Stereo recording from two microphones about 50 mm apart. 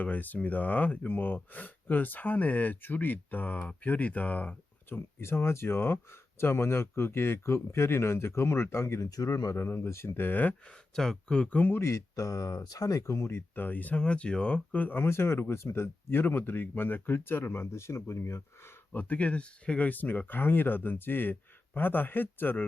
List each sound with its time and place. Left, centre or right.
0.0 s speech: left
4.9 s speech: left
10.2 s speech: left
10.9 s speech: centre
11.4 s speech: left
11.8 s speech: left
12.9 s speech: left
13.6 s speech: left
14.0 s speech: centre; by 15.1 s left
15.1 s speech: left
18.9 s speech: left